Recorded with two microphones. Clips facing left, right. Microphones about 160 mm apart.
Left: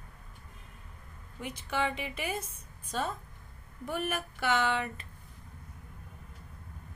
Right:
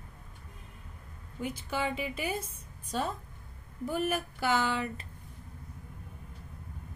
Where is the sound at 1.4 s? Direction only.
30° right (ahead or behind).